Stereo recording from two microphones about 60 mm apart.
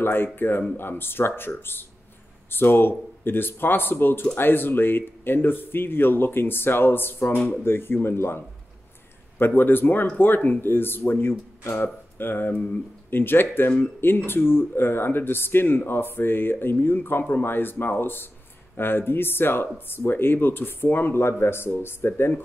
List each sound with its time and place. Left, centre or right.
0.0 s speech: left